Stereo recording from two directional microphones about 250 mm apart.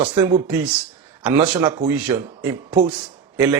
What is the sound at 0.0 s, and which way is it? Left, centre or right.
Speech, centre.